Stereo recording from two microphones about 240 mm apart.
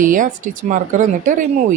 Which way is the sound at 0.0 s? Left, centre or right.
Right.